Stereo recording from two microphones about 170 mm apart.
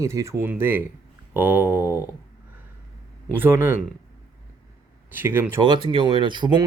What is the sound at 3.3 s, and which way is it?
Speech, 10° right (ahead or behind).